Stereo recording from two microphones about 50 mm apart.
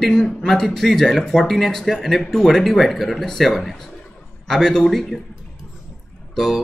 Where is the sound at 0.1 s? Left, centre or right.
Centre.